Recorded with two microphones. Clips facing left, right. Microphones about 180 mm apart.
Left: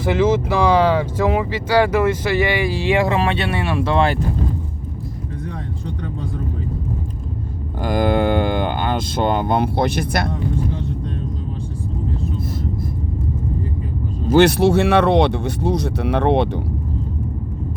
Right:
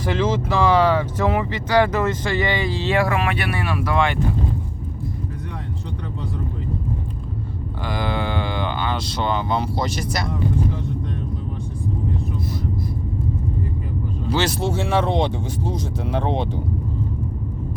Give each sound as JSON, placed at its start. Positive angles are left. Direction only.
{"t": 0.0, "sound": "speech", "side_deg": 10}
{"t": 7.8, "sound": "speech", "side_deg": 45}
{"t": 14.3, "sound": "speech", "side_deg": 60}